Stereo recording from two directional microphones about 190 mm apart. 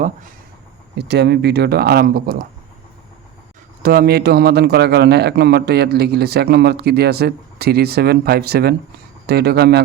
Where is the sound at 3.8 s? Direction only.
50° right (ahead or behind).